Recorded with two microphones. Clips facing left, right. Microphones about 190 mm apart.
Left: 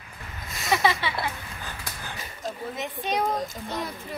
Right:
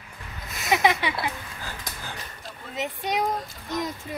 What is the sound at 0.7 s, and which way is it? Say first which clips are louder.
Speech: right 2 dB; 15° right (ahead or behind).